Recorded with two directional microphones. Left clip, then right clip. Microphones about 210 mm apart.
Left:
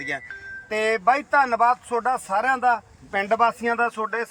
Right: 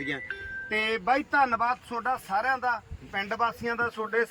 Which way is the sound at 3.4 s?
30° left (ahead or behind).